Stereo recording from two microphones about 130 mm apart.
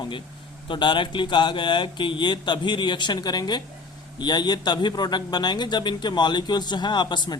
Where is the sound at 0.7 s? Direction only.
35° left (ahead or behind).